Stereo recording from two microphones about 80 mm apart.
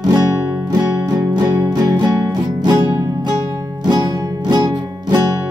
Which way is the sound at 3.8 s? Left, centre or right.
Right.